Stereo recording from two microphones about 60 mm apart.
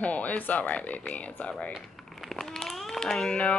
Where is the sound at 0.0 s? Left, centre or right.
Left.